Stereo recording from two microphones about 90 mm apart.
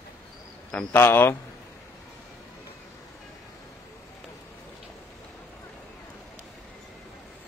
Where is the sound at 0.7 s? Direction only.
25° left (ahead or behind).